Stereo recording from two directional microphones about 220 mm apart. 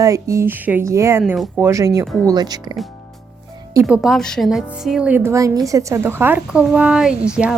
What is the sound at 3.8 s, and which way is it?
A woman's voice, 5° right (ahead or behind).